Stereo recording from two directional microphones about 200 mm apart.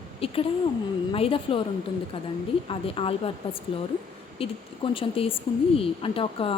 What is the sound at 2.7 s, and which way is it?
Speech, 25° left (ahead or behind).